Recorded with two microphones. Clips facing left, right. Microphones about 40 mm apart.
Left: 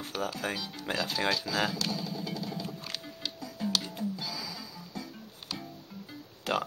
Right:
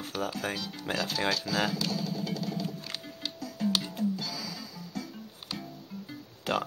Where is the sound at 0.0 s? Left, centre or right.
Centre.